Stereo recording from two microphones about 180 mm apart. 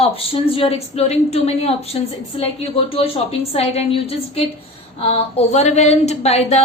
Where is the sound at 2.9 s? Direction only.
35° left (ahead or behind).